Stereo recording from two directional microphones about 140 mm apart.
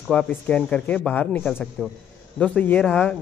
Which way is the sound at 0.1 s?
10° left (ahead or behind).